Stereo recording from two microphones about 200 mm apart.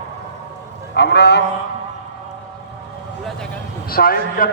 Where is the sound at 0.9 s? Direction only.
55° left (ahead or behind).